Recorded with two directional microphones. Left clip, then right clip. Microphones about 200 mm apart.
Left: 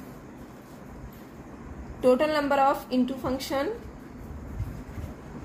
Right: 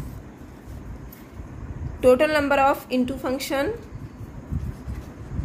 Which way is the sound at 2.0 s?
35° right (ahead or behind).